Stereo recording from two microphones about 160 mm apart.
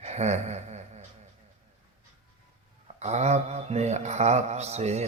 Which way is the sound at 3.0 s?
45° right (ahead or behind).